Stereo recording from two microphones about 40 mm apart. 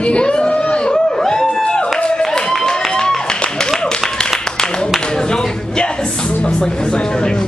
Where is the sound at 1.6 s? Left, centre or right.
Left.